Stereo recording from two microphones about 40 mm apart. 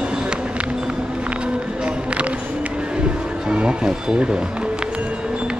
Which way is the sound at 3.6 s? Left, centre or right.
Right.